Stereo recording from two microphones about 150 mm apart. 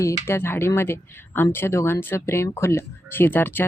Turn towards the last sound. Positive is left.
turn(degrees=15)  # may be behind; listen again after turning